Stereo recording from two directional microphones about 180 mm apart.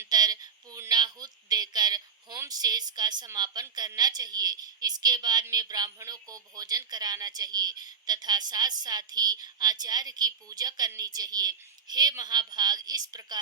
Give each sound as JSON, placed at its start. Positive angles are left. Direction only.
{"t": 0.0, "sound": "speech", "side_deg": -20}